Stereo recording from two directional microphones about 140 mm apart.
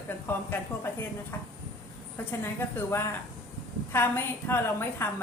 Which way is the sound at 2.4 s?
15° left (ahead or behind).